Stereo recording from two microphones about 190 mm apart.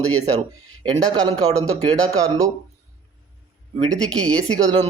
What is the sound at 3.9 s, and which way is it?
Speech, 5° left (ahead or behind).